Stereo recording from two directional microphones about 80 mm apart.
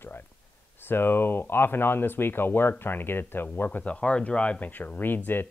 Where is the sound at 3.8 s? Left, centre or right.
Centre.